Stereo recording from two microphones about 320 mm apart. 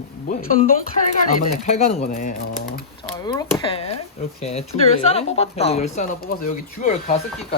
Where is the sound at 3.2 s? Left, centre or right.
Centre.